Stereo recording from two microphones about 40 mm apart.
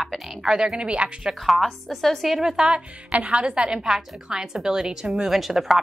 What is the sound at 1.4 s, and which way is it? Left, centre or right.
Speech, centre.